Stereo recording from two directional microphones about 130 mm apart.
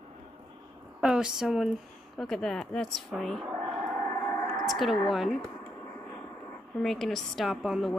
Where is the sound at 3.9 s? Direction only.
15° left (ahead or behind).